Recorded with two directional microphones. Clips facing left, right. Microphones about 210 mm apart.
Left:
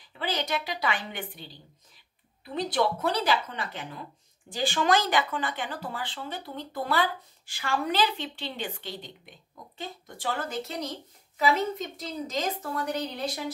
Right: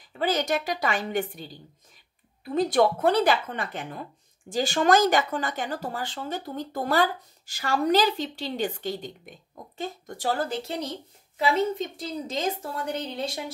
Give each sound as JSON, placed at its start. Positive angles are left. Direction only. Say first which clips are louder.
{"t": 0.2, "sound": "speech", "louder": "right 5 dB", "side_deg": -45}